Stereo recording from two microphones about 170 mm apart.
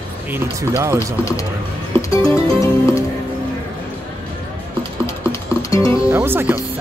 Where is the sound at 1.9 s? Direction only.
15° left (ahead or behind).